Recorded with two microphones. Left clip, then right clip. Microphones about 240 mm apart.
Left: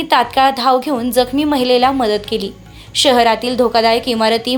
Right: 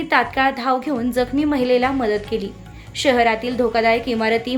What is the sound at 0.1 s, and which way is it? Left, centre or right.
A woman's voice, centre.